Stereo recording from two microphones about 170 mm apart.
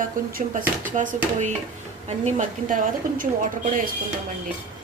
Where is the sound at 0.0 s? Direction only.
55° right (ahead or behind).